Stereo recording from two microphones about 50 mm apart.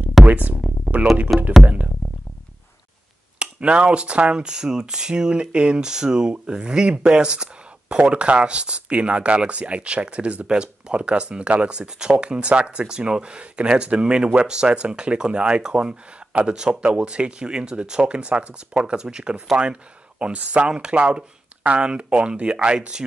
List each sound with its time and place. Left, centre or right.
0.2 s speech: right
3.3 s speech: right